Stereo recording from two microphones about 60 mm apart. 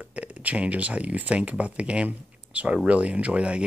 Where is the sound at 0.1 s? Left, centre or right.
Right.